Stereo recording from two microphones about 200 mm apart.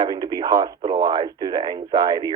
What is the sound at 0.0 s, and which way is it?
Speech, 20° right (ahead or behind).